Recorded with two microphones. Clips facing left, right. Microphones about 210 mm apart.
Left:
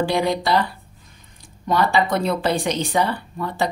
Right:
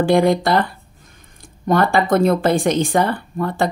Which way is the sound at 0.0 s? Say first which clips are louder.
Right 6 dB; 50° right (ahead or behind).